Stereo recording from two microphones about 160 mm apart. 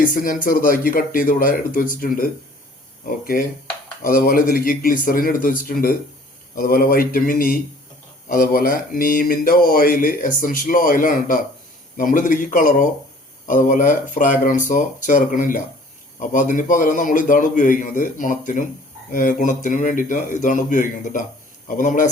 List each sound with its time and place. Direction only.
0.0 s speech: 60° left (ahead or behind)
3.3 s a man's voice: 55° left (ahead or behind)